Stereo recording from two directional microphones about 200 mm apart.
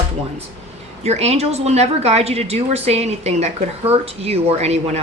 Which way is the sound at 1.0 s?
35° right (ahead or behind).